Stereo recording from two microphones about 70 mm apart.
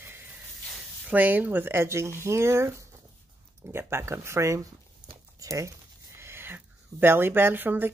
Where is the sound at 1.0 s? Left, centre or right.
Right.